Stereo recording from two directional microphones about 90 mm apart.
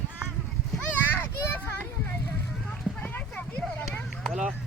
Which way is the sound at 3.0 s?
20° left (ahead or behind).